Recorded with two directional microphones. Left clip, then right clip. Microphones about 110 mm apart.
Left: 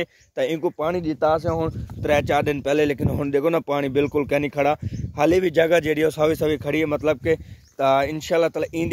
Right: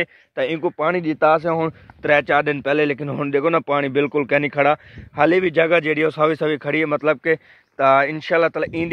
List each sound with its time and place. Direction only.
0.0 s speech: 35° left (ahead or behind)
0.7 s speech: 15° left (ahead or behind)
1.0 s speech: centre (ahead or behind)
2.0 s speech: 25° left (ahead or behind)